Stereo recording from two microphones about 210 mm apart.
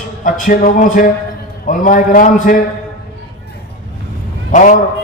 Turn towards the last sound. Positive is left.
turn(degrees=35)  # may be behind; listen again after turning